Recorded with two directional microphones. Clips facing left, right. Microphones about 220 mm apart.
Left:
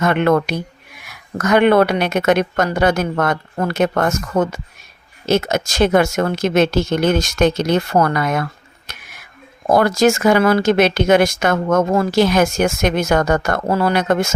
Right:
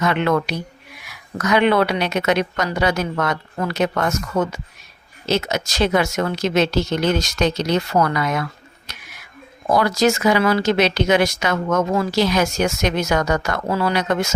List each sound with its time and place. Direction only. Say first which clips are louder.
0.0 s speech: left 4 dB; 50° left (ahead or behind)
8.9 s a sound: left 3 dB; 50° left (ahead or behind)
9.6 s speech: left 3 dB; 50° left (ahead or behind)